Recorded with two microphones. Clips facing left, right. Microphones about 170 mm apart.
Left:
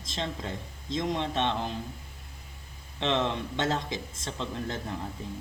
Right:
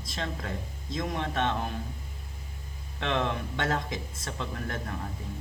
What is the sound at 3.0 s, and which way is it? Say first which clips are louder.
Speech: left 1 dB; 25° left (ahead or behind).